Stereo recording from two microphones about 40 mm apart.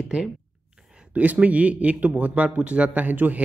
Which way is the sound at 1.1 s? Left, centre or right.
Right.